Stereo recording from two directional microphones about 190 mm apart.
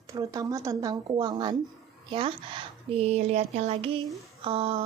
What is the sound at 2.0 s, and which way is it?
A woman's voice, 25° right (ahead or behind).